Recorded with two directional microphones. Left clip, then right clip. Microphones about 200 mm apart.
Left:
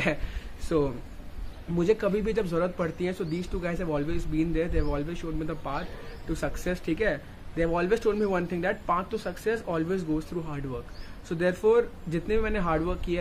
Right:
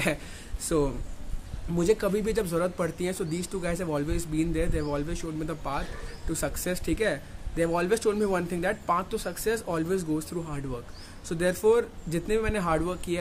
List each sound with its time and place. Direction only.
0.7 s speech: 10° right (ahead or behind)